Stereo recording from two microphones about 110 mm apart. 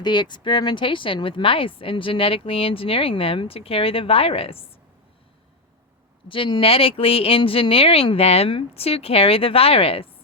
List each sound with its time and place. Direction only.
0.0 s speech: 40° left (ahead or behind); by 4.7 s 60° left (ahead or behind)
6.2 s speech: 50° left (ahead or behind)